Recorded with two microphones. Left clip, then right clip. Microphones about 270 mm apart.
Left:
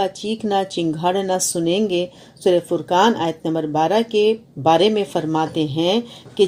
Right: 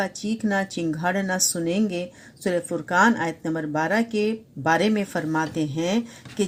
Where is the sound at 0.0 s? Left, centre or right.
Right.